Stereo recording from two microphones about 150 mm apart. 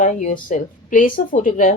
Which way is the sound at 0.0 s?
55° left (ahead or behind).